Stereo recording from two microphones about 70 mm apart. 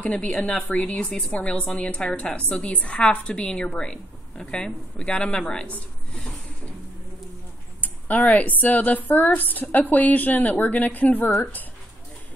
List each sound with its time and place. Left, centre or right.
0.0 s a woman's voice: centre
7.8 s a woman's voice: left